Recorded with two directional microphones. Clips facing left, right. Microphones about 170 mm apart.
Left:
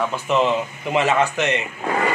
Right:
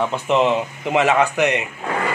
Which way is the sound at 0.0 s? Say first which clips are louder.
Right 2 dB; 20° right (ahead or behind).